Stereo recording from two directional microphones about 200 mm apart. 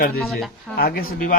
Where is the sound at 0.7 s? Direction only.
50° left (ahead or behind).